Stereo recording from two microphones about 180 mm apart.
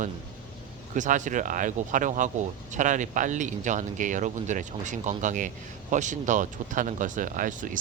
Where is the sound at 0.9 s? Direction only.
45° right (ahead or behind).